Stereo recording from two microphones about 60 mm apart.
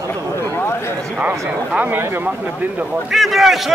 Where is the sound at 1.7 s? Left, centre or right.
Right.